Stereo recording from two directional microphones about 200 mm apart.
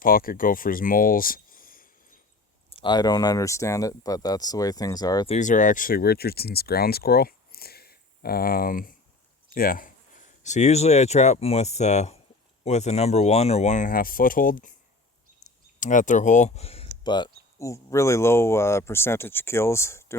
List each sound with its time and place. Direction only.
0.0 s speech: 45° left (ahead or behind)
2.6 s speech: 25° left (ahead or behind)
5.3 s speech: 40° left (ahead or behind); by 20.1 s 15° left (ahead or behind)